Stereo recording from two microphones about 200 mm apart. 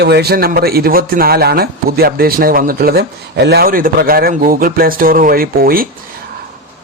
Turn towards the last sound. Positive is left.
turn(degrees=-45)  # may be behind; listen again after turning